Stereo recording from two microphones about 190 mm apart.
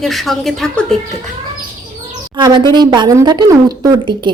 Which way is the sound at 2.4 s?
25° right (ahead or behind).